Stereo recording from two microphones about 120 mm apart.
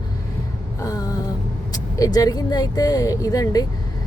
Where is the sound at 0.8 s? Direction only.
30° left (ahead or behind).